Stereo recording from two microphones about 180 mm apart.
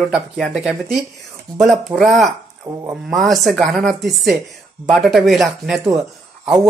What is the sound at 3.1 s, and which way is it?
Speech, centre (ahead or behind).